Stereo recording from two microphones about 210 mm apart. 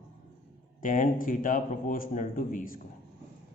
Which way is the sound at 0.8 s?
40° left (ahead or behind).